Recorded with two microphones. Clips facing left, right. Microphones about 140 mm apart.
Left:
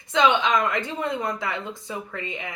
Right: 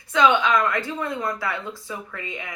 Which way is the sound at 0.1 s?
25° left (ahead or behind).